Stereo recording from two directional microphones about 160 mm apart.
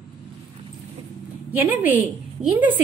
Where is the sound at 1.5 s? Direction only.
10° right (ahead or behind).